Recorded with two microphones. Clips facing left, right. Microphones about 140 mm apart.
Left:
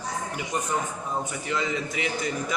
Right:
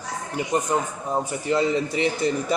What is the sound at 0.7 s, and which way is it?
A man's voice, 40° right (ahead or behind).